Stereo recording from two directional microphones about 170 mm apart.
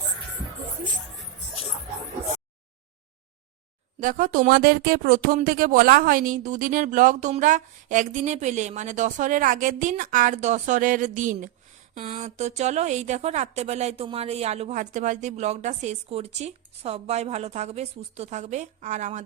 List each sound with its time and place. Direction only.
4.0 s a woman's voice: 50° right (ahead or behind)